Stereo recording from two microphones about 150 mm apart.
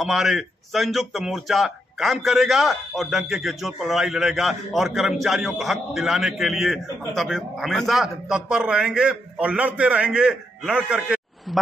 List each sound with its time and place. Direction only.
0.0 s speech: 5° right (ahead or behind)